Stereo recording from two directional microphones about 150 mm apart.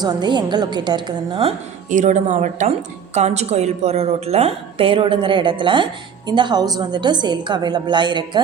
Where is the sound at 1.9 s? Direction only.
55° right (ahead or behind).